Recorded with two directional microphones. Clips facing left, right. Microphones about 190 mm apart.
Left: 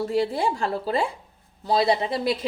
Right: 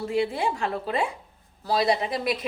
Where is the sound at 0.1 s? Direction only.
35° left (ahead or behind).